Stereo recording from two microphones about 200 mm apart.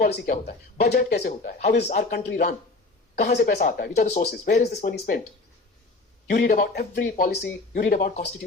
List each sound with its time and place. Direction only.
0.0 s speech: 55° left (ahead or behind)
1.3 s speech: 40° left (ahead or behind)
4.3 s speech: 55° left (ahead or behind)
4.6 s speech: 35° left (ahead or behind)
6.3 s speech: 50° left (ahead or behind)